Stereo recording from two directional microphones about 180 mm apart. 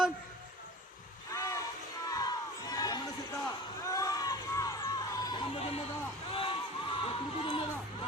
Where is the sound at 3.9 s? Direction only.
20° left (ahead or behind).